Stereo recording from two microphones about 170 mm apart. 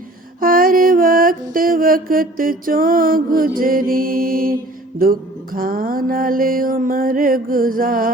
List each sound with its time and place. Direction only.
0.3 s mantra: 55° right (ahead or behind)